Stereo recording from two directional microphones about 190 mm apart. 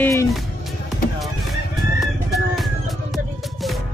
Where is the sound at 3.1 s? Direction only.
Centre (ahead or behind).